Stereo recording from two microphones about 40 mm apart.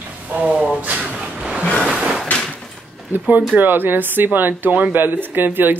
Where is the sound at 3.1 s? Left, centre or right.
Right.